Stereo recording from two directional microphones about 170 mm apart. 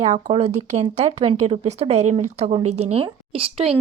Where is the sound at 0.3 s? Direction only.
40° right (ahead or behind).